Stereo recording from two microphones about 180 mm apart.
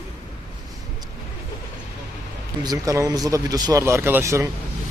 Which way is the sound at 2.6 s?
20° right (ahead or behind).